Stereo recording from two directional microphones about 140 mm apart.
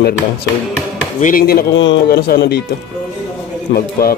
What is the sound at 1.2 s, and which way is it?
Speech, 90° left.